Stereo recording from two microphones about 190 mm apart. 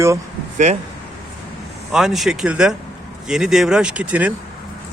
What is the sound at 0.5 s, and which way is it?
Speech, 40° right (ahead or behind).